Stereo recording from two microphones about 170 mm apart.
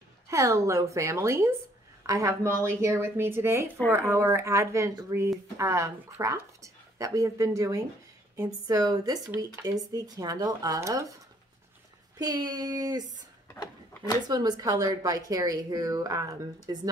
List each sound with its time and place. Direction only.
0.3 s a woman's voice: 20° right (ahead or behind)
12.2 s a woman's voice: 25° right (ahead or behind)
14.2 s a woman's voice: 25° right (ahead or behind)